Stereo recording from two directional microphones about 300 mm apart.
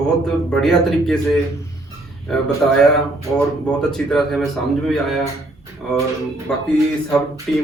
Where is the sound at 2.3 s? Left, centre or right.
Centre.